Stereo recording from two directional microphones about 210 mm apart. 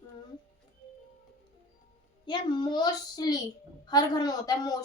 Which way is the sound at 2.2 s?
20° left (ahead or behind).